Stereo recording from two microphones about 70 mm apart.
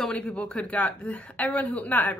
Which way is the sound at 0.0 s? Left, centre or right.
Centre.